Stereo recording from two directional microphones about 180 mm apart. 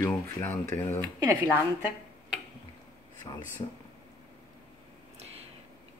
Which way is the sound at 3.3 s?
25° left (ahead or behind).